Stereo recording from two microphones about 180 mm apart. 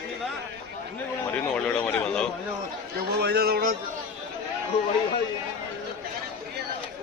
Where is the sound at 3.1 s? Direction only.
65° right (ahead or behind).